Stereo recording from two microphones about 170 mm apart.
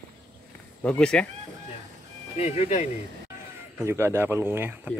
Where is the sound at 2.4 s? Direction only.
40° left (ahead or behind).